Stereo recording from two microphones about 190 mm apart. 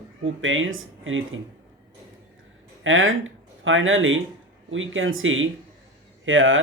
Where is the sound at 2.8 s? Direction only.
90° right.